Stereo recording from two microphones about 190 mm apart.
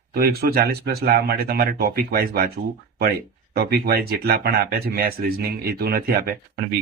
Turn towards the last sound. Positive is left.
turn(degrees=-55)  # may be behind; listen again after turning